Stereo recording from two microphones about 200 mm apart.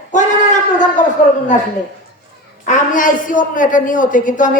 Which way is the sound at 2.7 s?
40° left (ahead or behind).